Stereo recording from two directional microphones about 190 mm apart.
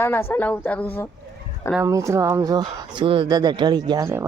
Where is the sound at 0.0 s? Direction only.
10° left (ahead or behind).